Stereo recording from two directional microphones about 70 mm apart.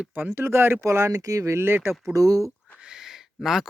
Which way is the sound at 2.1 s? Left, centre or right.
Right.